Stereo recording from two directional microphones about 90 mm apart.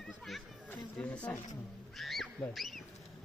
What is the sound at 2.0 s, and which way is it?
Speech, centre (ahead or behind).